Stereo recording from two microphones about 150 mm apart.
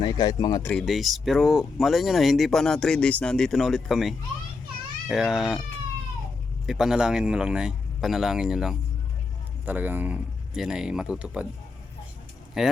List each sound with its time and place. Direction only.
0.0 s speech: 25° left (ahead or behind)
0.6 s speech: 5° left (ahead or behind)
6.7 s speech: 5° right (ahead or behind)
12.6 s speech: 5° right (ahead or behind)